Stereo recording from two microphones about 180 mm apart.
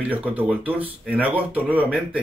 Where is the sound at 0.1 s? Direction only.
10° right (ahead or behind).